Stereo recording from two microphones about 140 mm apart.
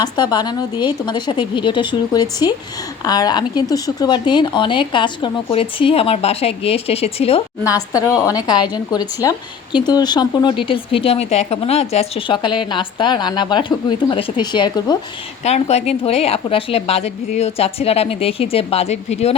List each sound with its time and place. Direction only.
0.0 s speech: 30° left (ahead or behind); by 7.4 s 45° left (ahead or behind)
7.9 s a woman's voice: 25° left (ahead or behind)
15.4 s speech: 50° left (ahead or behind)